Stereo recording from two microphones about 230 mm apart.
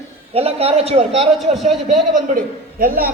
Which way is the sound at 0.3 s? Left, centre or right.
Right.